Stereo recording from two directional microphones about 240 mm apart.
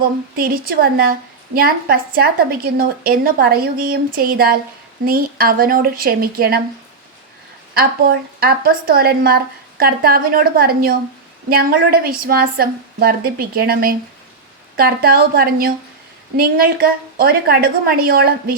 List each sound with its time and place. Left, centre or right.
0.0 s a woman's voice: right
7.7 s a woman's voice: right